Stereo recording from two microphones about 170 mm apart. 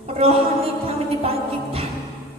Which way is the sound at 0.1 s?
35° right (ahead or behind).